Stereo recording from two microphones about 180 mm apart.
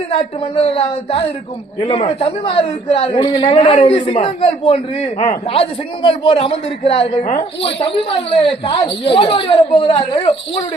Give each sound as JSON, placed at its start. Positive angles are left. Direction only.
{"t": 0.1, "sound": "a man's voice", "side_deg": 35}